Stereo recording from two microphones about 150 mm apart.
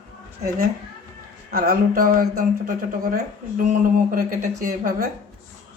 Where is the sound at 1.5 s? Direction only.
80° right.